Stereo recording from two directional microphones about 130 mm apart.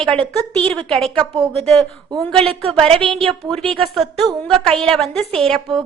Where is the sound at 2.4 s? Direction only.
45° right (ahead or behind).